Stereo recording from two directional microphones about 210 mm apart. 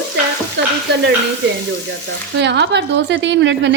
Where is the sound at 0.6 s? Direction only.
55° right (ahead or behind).